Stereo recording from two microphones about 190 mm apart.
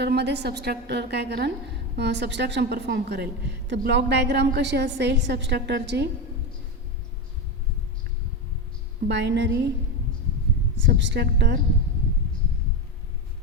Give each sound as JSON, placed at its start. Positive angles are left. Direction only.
{"t": 0.0, "sound": "a woman's voice", "side_deg": -60}
{"t": 9.0, "sound": "a woman's voice", "side_deg": -65}
{"t": 10.8, "sound": "a woman's voice", "side_deg": -70}